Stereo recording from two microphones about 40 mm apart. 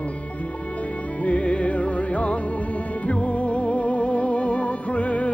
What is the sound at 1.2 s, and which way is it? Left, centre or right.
Music, left.